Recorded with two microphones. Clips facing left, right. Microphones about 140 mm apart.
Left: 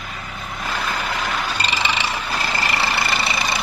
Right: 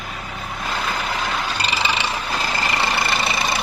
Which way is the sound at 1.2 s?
10° right (ahead or behind).